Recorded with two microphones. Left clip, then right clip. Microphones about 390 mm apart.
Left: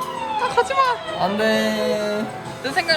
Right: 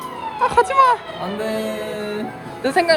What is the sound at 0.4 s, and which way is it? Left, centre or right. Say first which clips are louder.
Emergency vehicle: right 5 dB; centre.